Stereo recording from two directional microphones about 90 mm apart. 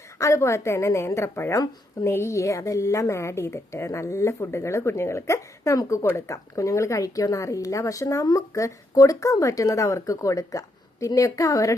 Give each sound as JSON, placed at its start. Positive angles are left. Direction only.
{"t": 0.2, "sound": "speech", "side_deg": 35}